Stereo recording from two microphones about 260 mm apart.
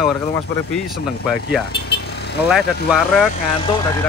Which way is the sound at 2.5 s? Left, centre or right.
Centre.